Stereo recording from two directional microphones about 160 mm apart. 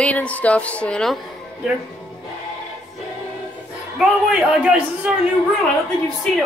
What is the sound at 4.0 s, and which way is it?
Speech, 5° right (ahead or behind).